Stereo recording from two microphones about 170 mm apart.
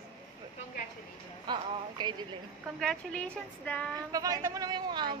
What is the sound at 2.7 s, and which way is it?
A woman's voice, 5° left (ahead or behind).